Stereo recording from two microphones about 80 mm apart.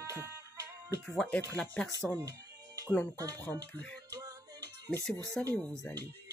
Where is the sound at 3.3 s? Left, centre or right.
Left.